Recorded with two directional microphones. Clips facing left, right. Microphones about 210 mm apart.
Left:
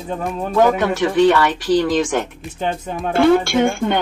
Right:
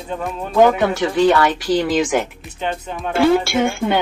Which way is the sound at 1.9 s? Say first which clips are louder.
Right 1 dB; 10° right (ahead or behind).